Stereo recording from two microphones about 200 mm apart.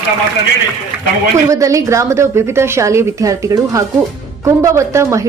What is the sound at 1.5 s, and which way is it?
A woman's voice, 15° right (ahead or behind).